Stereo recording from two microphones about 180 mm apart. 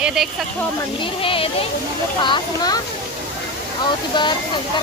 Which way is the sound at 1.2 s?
30° left (ahead or behind).